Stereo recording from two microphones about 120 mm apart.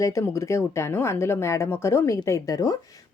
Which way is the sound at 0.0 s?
25° left (ahead or behind).